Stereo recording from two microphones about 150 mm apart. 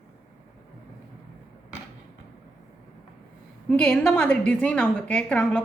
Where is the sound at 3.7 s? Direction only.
5° left (ahead or behind).